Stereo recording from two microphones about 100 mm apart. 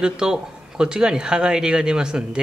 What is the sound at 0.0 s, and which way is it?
Speech, 5° right (ahead or behind).